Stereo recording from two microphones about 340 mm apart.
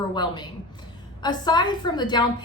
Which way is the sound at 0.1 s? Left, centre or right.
Centre.